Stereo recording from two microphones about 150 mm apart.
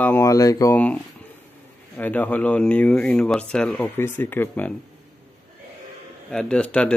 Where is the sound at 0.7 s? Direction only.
10° left (ahead or behind).